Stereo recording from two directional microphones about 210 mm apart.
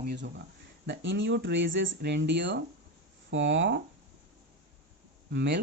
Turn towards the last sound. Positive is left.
turn(degrees=-55)  # may be behind; listen again after turning